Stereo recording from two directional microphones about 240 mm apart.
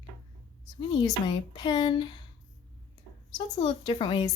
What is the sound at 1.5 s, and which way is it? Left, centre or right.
Speech, centre.